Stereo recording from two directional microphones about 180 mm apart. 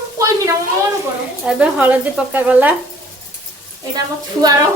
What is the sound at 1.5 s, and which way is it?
A woman's voice, 10° right (ahead or behind).